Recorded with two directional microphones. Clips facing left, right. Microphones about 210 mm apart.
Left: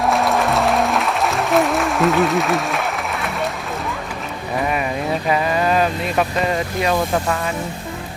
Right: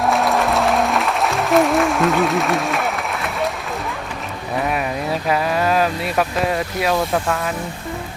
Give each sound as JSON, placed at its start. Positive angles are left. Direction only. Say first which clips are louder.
{"t": 0.0, "sound": "music", "louder": "even", "side_deg": 0}
{"t": 4.5, "sound": "a sound", "louder": "even", "side_deg": 0}
{"t": 5.3, "sound": "speech", "louder": "even", "side_deg": 0}